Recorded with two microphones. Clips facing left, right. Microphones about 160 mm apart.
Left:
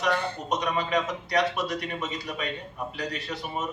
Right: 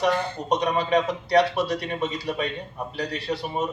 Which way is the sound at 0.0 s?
30° right (ahead or behind).